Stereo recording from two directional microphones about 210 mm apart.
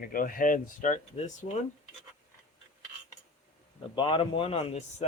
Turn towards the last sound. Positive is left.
turn(degrees=30)  # may be behind; listen again after turning